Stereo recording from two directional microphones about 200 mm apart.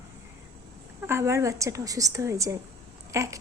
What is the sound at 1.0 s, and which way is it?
Speech, 15° right (ahead or behind).